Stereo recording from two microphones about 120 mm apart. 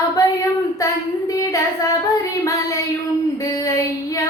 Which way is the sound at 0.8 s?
30° left (ahead or behind).